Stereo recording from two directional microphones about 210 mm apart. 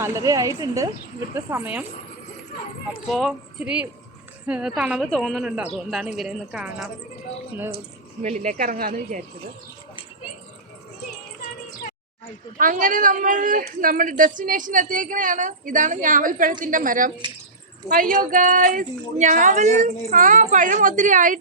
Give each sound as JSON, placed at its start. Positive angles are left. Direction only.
{"t": 0.0, "sound": "speech", "side_deg": -15}
{"t": 3.1, "sound": "a woman's voice", "side_deg": 0}
{"t": 8.2, "sound": "speech", "side_deg": -35}
{"t": 12.5, "sound": "speech", "side_deg": -40}